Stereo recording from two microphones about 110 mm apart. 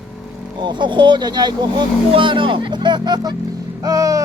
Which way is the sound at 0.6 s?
45° right (ahead or behind).